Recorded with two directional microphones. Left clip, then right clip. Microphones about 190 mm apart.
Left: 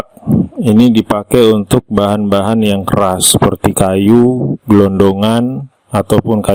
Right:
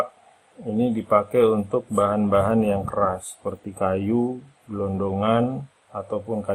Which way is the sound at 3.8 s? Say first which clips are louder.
Left 12 dB; 60° left (ahead or behind).